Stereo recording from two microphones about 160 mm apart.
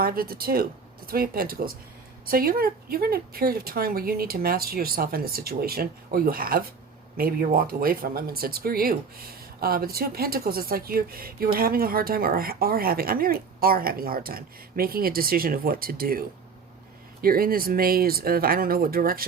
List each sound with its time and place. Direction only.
0.0 s speech: 70° right (ahead or behind)